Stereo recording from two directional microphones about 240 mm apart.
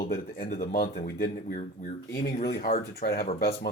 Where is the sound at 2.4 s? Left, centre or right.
Left.